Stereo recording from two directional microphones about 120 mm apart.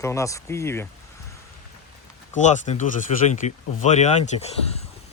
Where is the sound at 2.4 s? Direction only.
90° left; by 4.7 s 65° left (ahead or behind).